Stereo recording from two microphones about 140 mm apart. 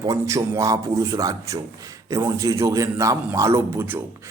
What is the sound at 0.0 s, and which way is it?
Speech, 25° right (ahead or behind).